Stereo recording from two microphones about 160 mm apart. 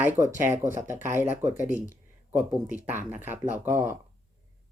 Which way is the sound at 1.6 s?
20° left (ahead or behind).